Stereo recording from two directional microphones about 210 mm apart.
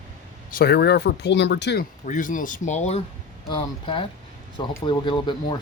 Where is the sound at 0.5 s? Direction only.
50° left (ahead or behind).